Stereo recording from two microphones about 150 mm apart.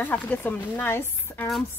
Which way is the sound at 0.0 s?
10° left (ahead or behind).